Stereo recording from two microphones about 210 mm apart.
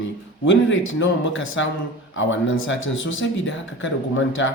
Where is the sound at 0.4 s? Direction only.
65° left (ahead or behind).